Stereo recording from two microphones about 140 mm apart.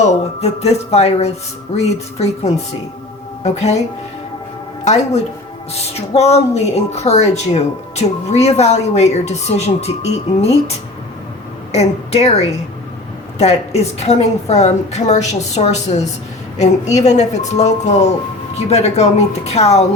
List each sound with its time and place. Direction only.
0.0 s a woman's voice: 50° left (ahead or behind)
5.7 s a woman's voice: 50° left (ahead or behind)